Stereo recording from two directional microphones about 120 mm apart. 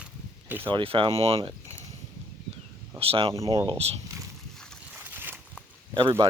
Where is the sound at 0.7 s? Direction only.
45° right (ahead or behind).